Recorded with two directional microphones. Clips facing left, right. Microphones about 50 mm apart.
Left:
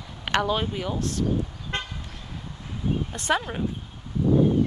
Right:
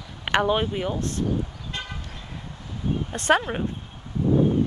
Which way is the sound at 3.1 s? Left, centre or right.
Right.